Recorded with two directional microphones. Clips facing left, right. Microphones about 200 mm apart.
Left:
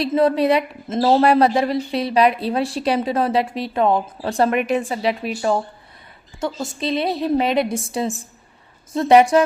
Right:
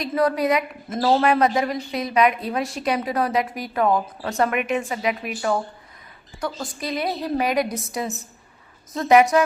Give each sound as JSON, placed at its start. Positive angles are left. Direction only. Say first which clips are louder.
{"t": 0.0, "sound": "a woman's voice", "louder": "left 4 dB", "side_deg": 25}